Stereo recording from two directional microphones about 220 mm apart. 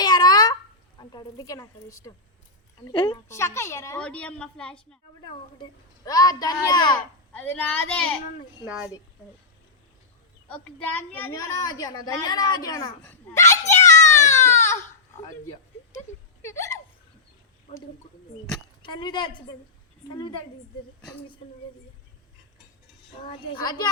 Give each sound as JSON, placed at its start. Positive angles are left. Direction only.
{"t": 0.0, "sound": "a sound", "side_deg": 20}
{"t": 0.9, "sound": "a woman's voice", "side_deg": 20}
{"t": 5.2, "sound": "a child's voice", "side_deg": 20}
{"t": 7.3, "sound": "a child's voice", "side_deg": 5}
{"t": 10.5, "sound": "a child's voice", "side_deg": 5}
{"t": 16.4, "sound": "hiccup", "side_deg": 10}
{"t": 18.5, "sound": "speech", "side_deg": 20}
{"t": 23.5, "sound": "speech", "side_deg": 20}